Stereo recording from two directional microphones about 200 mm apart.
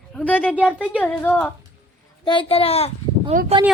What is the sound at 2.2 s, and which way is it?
Speech, 25° left (ahead or behind).